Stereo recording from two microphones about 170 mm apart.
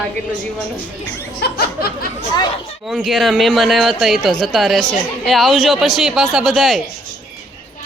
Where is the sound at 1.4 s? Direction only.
65° left (ahead or behind).